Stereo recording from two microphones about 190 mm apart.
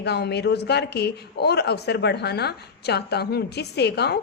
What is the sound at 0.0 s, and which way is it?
A man's voice, 60° left (ahead or behind).